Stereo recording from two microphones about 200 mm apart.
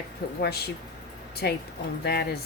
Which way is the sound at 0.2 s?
55° left (ahead or behind).